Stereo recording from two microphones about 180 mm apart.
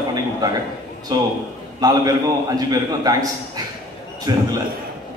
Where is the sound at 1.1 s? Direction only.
20° right (ahead or behind).